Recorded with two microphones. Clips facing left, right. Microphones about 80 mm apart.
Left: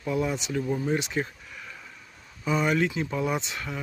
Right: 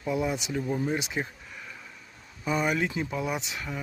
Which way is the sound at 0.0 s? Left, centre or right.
Centre.